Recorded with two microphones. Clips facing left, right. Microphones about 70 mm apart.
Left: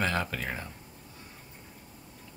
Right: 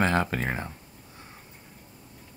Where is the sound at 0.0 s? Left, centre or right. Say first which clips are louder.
Right 5 dB; right.